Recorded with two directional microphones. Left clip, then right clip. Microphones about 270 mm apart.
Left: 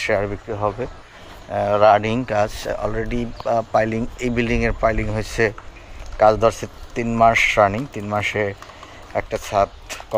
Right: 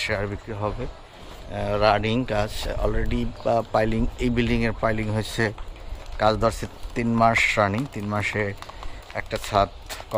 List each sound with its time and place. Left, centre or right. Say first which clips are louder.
0.0 s speech: left 6 dB; centre